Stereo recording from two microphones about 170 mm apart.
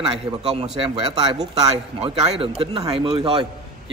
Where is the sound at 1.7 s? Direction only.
35° right (ahead or behind).